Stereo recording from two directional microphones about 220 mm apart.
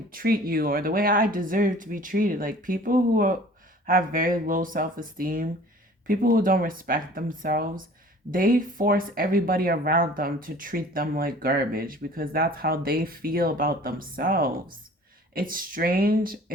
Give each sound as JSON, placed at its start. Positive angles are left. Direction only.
{"t": 0.1, "sound": "speech", "side_deg": -40}